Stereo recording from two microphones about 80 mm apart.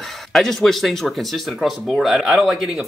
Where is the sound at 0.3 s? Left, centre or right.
Centre.